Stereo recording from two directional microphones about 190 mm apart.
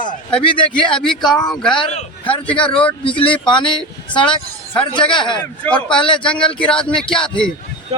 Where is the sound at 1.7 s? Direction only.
30° left (ahead or behind).